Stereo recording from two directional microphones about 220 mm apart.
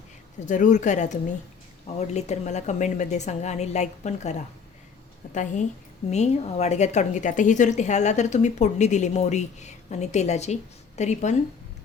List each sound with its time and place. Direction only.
0.4 s a woman's voice: 35° left (ahead or behind)